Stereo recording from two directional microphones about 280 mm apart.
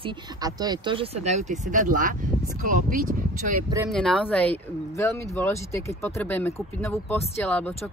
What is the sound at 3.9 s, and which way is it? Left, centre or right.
Speech, centre.